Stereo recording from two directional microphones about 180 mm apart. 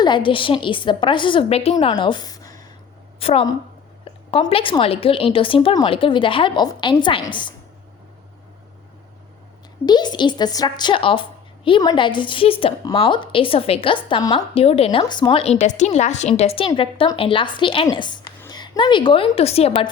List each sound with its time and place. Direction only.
0.0 s a woman's voice: 25° left (ahead or behind)
3.2 s a woman's voice: 30° left (ahead or behind)
9.8 s a woman's voice: 25° left (ahead or behind)